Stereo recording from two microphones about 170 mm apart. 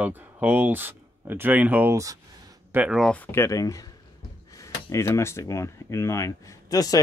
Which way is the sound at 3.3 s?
15° left (ahead or behind).